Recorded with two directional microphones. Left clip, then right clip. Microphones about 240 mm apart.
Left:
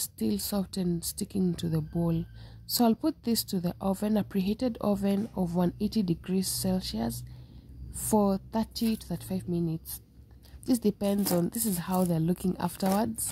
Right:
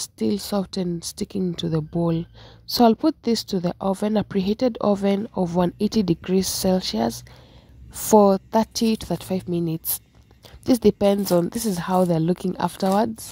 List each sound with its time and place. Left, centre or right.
0.0 s a woman's voice: right